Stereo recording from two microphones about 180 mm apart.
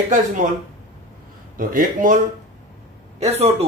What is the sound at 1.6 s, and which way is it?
Speech, 50° right (ahead or behind).